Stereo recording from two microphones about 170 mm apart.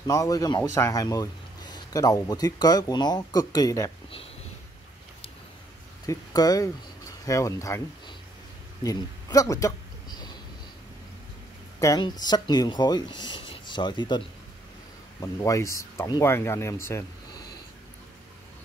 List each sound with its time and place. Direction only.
0.0 s speech: 20° left (ahead or behind)
6.0 s speech: 20° left (ahead or behind)
8.8 s a sound: 20° left (ahead or behind)
11.8 s speech: 20° left (ahead or behind)